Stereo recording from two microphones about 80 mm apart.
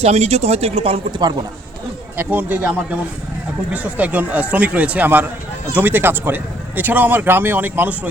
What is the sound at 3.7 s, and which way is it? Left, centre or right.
Speech, centre.